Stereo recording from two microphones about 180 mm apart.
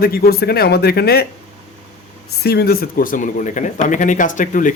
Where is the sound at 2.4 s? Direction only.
60° left (ahead or behind).